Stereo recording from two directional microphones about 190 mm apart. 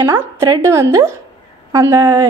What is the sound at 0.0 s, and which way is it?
A woman's voice, 15° right (ahead or behind).